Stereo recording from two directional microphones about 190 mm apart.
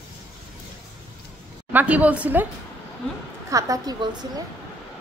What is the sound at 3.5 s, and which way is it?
Speech, 15° right (ahead or behind).